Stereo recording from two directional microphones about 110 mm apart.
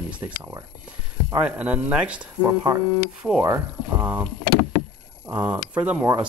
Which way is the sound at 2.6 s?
30° right (ahead or behind).